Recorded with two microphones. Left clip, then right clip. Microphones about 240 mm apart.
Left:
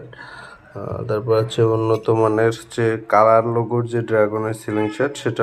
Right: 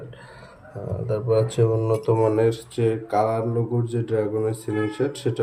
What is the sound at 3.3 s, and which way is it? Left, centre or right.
Speech, left.